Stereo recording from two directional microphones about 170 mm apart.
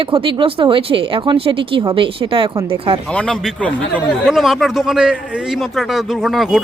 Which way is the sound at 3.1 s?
5° left (ahead or behind).